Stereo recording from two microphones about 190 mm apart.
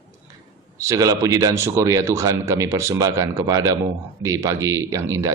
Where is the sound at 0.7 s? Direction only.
15° right (ahead or behind).